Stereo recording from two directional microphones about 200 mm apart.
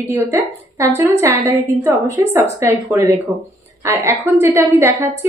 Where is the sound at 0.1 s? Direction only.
15° right (ahead or behind).